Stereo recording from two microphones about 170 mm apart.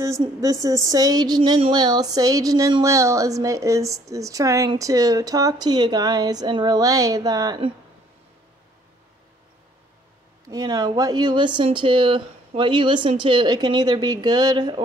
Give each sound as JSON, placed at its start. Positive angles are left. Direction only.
{"t": 0.0, "sound": "speech", "side_deg": -20}
{"t": 10.5, "sound": "speech", "side_deg": -20}